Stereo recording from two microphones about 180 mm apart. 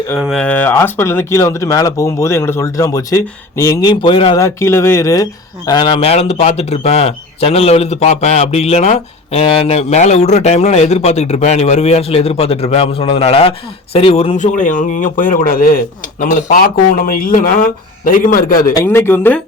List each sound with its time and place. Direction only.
0.2 s speech: centre (ahead or behind); by 18.7 s 50° left (ahead or behind)
18.7 s speech: 15° left (ahead or behind)